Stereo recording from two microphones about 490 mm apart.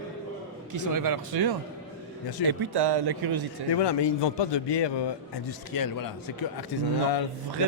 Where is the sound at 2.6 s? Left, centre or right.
Right.